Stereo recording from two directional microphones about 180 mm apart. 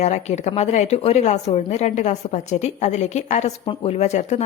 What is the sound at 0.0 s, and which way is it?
A woman's voice, 40° left (ahead or behind).